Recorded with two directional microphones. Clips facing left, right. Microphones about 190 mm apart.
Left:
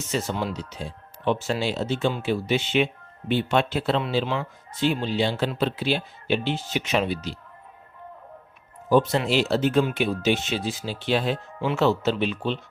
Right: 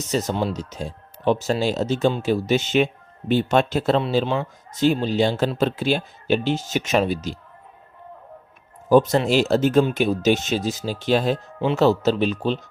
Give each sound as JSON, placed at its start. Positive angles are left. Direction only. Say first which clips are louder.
{"t": 0.0, "sound": "speech", "louder": "right 4 dB", "side_deg": -40}
{"t": 8.9, "sound": "speech", "louder": "right 4 dB", "side_deg": -45}